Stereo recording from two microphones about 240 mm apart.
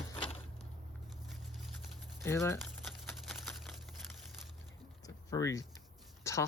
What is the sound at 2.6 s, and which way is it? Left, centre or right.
Crumpling, centre.